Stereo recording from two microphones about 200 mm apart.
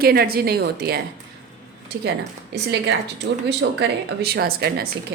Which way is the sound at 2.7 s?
60° right (ahead or behind).